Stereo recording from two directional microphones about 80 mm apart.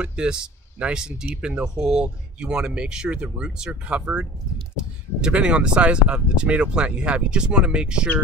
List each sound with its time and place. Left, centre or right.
0.0 s speech: centre